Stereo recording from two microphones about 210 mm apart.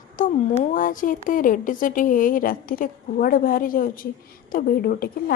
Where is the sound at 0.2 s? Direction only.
40° left (ahead or behind).